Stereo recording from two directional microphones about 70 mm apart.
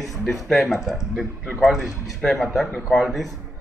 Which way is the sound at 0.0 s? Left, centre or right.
Centre.